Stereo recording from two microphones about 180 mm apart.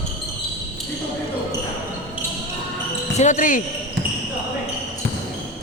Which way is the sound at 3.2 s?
45° left (ahead or behind).